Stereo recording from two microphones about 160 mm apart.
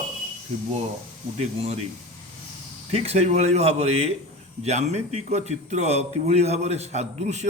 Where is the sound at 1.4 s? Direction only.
45° right (ahead or behind).